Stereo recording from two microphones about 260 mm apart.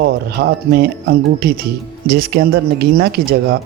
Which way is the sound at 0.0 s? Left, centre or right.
Right.